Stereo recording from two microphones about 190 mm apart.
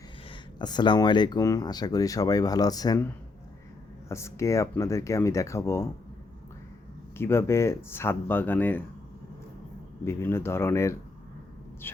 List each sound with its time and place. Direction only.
0.3 s speech: 25° left (ahead or behind)
4.1 s speech: 15° left (ahead or behind)
7.2 s speech: 15° left (ahead or behind)
10.0 s speech: 15° left (ahead or behind)